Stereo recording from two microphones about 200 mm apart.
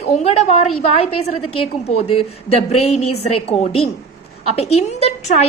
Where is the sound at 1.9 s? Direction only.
30° left (ahead or behind).